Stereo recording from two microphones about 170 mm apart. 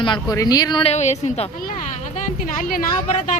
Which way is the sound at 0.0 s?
25° left (ahead or behind).